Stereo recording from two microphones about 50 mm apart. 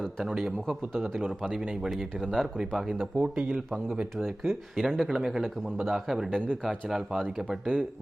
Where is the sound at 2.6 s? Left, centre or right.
Centre.